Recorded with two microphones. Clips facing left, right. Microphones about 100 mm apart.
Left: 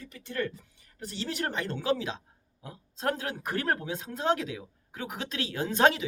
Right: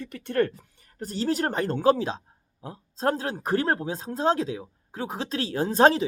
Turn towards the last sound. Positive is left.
turn(degrees=-35)  # may be behind; listen again after turning